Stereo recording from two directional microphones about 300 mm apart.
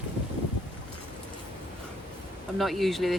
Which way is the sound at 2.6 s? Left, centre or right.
Centre.